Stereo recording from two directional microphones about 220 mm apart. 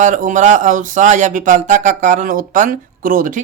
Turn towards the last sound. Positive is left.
turn(degrees=-40)  # may be behind; listen again after turning